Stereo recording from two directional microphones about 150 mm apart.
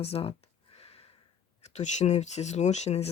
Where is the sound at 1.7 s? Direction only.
50° left (ahead or behind).